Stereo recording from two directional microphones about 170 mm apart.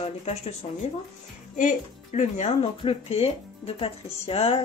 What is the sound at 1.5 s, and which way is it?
Speech, 45° left (ahead or behind).